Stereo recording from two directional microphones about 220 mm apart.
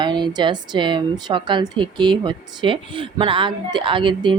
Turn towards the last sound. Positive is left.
turn(degrees=-20)  # may be behind; listen again after turning